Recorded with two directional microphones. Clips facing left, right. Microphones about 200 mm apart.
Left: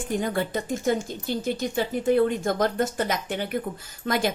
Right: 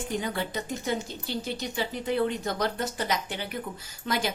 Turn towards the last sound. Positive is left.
turn(degrees=50)  # may be behind; listen again after turning